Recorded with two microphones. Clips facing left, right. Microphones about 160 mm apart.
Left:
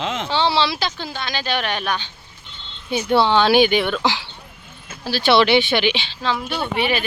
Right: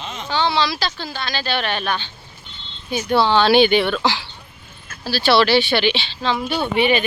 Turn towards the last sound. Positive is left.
turn(degrees=0)  # may be behind; listen again after turning